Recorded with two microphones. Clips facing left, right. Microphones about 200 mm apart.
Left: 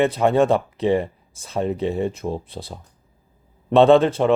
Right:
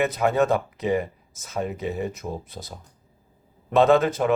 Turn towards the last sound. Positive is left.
turn(degrees=30)  # may be behind; listen again after turning